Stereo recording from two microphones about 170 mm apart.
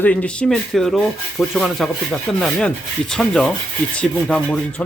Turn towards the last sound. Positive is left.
turn(degrees=5)  # may be behind; listen again after turning